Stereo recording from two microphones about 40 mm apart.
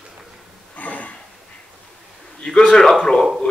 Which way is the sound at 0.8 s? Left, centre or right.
Left.